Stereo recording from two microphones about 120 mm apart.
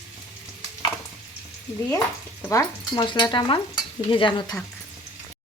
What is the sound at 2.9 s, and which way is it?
Speech, 40° left (ahead or behind).